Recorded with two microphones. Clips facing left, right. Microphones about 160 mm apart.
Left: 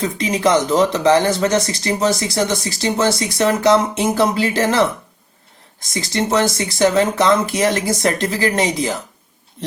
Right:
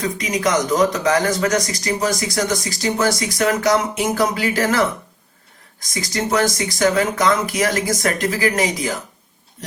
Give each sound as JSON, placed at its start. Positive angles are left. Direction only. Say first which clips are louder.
{"t": 0.0, "sound": "speech", "louder": "left 3 dB", "side_deg": 30}
{"t": 5.9, "sound": "speech", "louder": "left 2 dB", "side_deg": 25}